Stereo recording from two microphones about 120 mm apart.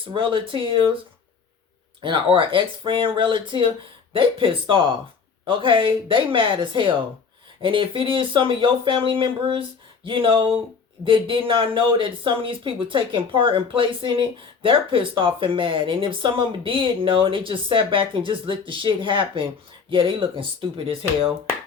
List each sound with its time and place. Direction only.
0.0 s speech: 45° right (ahead or behind)
2.0 s speech: 45° right (ahead or behind)